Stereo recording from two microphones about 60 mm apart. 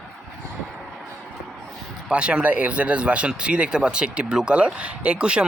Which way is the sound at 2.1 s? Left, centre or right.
Centre.